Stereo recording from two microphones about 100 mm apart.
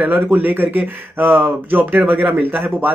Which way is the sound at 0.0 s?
20° right (ahead or behind).